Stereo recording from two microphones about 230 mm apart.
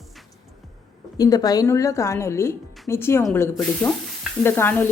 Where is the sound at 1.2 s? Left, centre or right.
Centre.